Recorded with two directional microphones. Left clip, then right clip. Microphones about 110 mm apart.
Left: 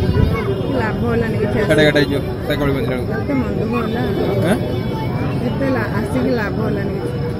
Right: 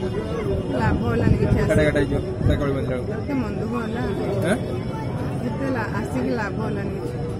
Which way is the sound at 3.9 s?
Centre (ahead or behind).